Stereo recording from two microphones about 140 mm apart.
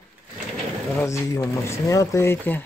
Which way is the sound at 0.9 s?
20° left (ahead or behind).